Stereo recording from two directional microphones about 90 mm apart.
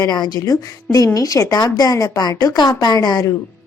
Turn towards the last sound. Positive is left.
turn(degrees=50)  # may be behind; listen again after turning